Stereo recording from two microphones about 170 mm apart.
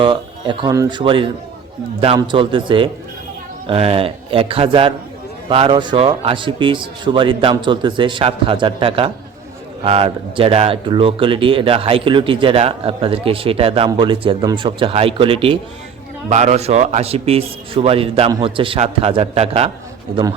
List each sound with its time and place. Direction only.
0.0 s a man's voice: 30° right (ahead or behind)
16.3 s speech: 40° right (ahead or behind)